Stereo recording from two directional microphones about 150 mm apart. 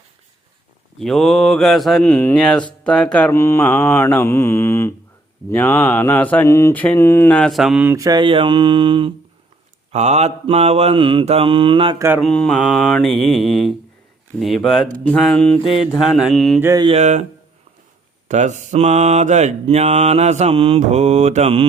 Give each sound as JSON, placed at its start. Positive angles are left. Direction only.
{"t": 0.9, "sound": "mantra", "side_deg": 0}
{"t": 2.0, "sound": "mantra", "side_deg": 10}
{"t": 7.9, "sound": "mantra", "side_deg": -25}
{"t": 9.9, "sound": "mantra", "side_deg": -50}
{"t": 11.9, "sound": "mantra", "side_deg": -15}
{"t": 12.2, "sound": "mantra", "side_deg": 5}
{"t": 16.6, "sound": "mantra", "side_deg": -20}
{"t": 16.8, "sound": "mantra", "side_deg": -45}
{"t": 18.3, "sound": "mantra", "side_deg": -55}